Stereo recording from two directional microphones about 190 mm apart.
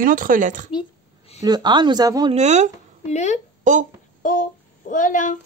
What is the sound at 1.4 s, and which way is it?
Speech, 20° right (ahead or behind).